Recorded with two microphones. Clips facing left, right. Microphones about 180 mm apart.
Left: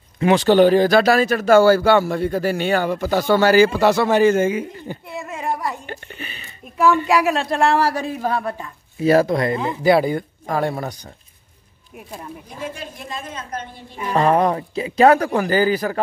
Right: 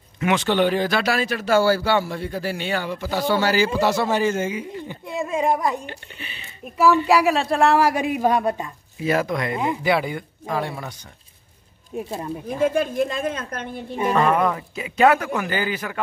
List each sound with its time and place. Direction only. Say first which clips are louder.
0.2 s speech: left 6 dB; 35° left (ahead or behind); by 4.6 s 55° left (ahead or behind)
5.1 s a woman's voice: right 6 dB; 15° right (ahead or behind)
5.9 s speech: left 4 dB; 45° left (ahead or behind)
7.1 s speech: even; centre (ahead or behind); by 8.7 s 20° right (ahead or behind)
9.0 s a man's voice: left 6 dB; 35° left (ahead or behind)
12.5 s a woman's voice: right 13 dB; 50° right (ahead or behind)
14.1 s a man's voice: left 4 dB; 35° left (ahead or behind)